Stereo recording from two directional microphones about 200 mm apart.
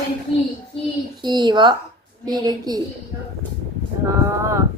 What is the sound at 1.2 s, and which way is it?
Speech, 20° right (ahead or behind).